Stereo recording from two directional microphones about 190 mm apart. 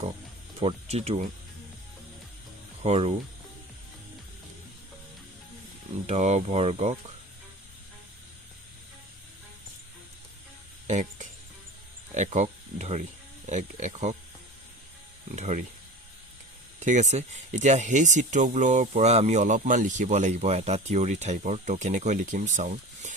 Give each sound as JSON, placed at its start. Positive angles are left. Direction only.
{"t": 0.6, "sound": "speech", "side_deg": -35}
{"t": 2.8, "sound": "speech", "side_deg": -35}
{"t": 6.1, "sound": "speech", "side_deg": -35}
{"t": 10.8, "sound": "speech", "side_deg": -40}
{"t": 15.4, "sound": "speech", "side_deg": -40}
{"t": 16.8, "sound": "speech", "side_deg": -40}